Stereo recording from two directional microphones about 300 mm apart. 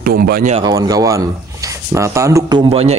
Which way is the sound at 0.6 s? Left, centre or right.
Centre.